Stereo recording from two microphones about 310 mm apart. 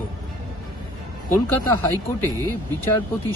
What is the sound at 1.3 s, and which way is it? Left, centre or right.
Speech, centre.